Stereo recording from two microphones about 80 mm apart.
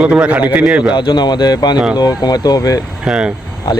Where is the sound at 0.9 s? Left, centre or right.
Left.